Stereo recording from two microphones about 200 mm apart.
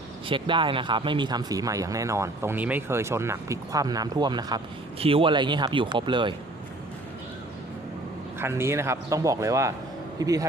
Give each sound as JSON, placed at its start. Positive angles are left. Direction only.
{"t": 0.3, "sound": "speech", "side_deg": -25}
{"t": 8.4, "sound": "a man's voice", "side_deg": -10}